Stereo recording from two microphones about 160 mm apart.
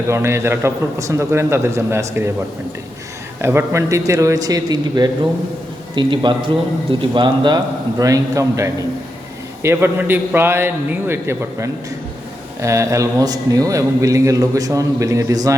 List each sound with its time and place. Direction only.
0.1 s a man's voice: 15° right (ahead or behind)
3.4 s a man's voice: 15° right (ahead or behind)